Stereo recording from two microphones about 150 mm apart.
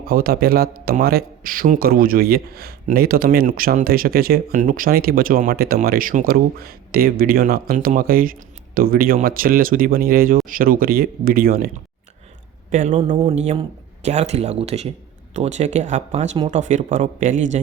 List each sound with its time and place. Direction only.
0.0 s a man's voice: 85° right
4.5 s speech: 60° right (ahead or behind)
12.7 s speech: 55° right (ahead or behind)
13.1 s speech: 45° right (ahead or behind)